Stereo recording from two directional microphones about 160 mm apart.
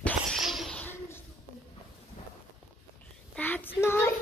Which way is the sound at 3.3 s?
10° left (ahead or behind).